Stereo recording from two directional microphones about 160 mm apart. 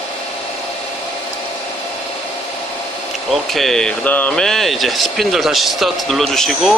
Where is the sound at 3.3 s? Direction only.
Centre (ahead or behind).